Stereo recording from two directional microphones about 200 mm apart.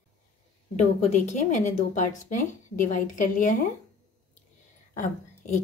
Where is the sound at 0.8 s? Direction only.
35° left (ahead or behind).